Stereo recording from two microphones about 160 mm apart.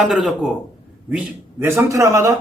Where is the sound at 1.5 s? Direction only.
15° right (ahead or behind).